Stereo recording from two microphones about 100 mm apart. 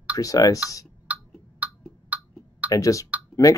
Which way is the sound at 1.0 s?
15° right (ahead or behind).